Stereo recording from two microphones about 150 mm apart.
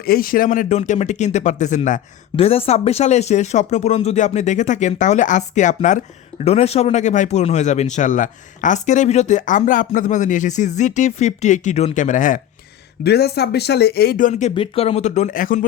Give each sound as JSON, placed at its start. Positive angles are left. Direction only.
{"t": 0.0, "sound": "speech", "side_deg": 80}
{"t": 0.8, "sound": "speech", "side_deg": 50}
{"t": 2.3, "sound": "speech", "side_deg": 40}
{"t": 6.4, "sound": "speech", "side_deg": 45}
{"t": 13.1, "sound": "speech", "side_deg": 90}
{"t": 14.5, "sound": "speech", "side_deg": 40}